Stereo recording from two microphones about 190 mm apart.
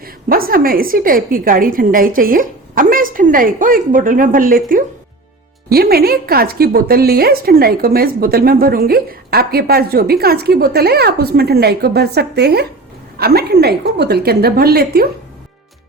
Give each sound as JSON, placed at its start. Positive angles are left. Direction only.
{"t": 0.0, "sound": "a woman's voice", "side_deg": -50}